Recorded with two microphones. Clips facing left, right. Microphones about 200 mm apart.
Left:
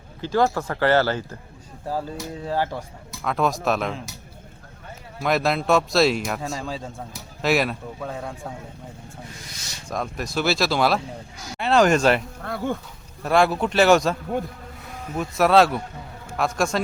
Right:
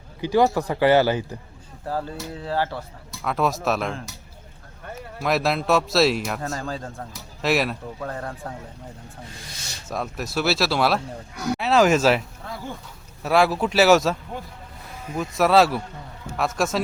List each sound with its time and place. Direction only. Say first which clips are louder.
0.2 s speech: right 2 dB; 15° right (ahead or behind)
1.9 s speech: even; 10° left (ahead or behind)
3.1 s speech: even; centre (ahead or behind)
5.2 s speech: left 1 dB; centre (ahead or behind)
9.9 s speech: even; 5° right (ahead or behind)
11.3 s speech: right 12 dB; 65° right (ahead or behind)
11.6 s speech: even; centre (ahead or behind)
12.5 s speech: left 8 dB; 60° left (ahead or behind)
13.2 s speech: even; 5° right (ahead or behind)